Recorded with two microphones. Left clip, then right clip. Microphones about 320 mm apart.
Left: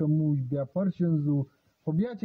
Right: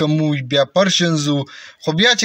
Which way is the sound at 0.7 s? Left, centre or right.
Left.